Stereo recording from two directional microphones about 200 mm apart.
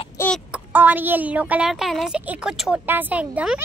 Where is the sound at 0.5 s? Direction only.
10° right (ahead or behind).